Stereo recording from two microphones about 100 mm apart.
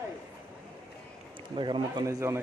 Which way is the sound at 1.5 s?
55° right (ahead or behind).